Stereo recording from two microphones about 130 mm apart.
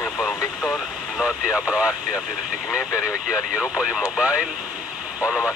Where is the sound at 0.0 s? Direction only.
5° right (ahead or behind).